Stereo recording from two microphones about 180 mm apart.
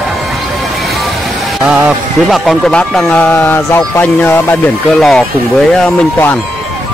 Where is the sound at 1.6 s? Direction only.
5° right (ahead or behind); by 6.3 s 10° left (ahead or behind).